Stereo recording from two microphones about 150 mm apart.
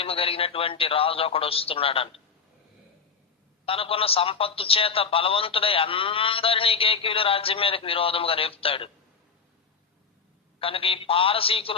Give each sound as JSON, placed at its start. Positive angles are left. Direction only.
{"t": 0.0, "sound": "speech", "side_deg": 40}
{"t": 3.7, "sound": "speech", "side_deg": 40}
{"t": 10.6, "sound": "speech", "side_deg": 40}